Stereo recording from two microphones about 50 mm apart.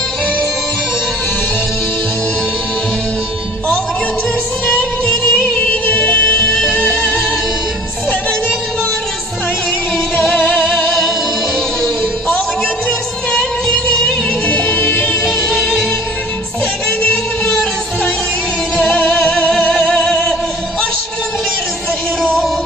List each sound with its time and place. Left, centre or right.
4.6 s music: left
6.7 s music: left
10.3 s music: left
13.8 s music: left
18.8 s music: left